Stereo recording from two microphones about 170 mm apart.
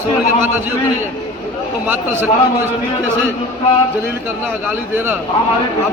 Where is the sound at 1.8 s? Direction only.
15° right (ahead or behind).